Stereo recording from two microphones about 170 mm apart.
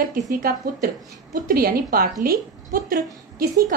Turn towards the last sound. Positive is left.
turn(degrees=-60)  # may be behind; listen again after turning